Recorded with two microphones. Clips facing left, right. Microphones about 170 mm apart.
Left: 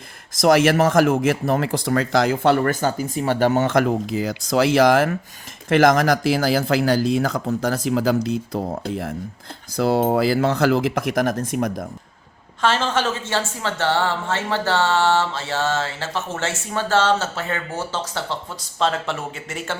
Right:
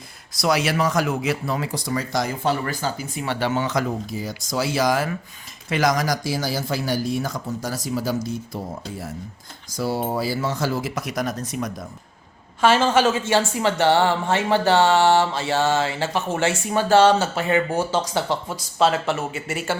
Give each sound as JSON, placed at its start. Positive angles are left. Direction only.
{"t": 0.3, "sound": "speech", "side_deg": 50}
{"t": 6.5, "sound": "speech", "side_deg": 85}
{"t": 12.6, "sound": "a woman's voice", "side_deg": -10}